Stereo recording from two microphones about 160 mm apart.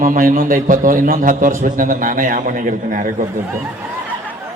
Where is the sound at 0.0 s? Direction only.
60° right (ahead or behind).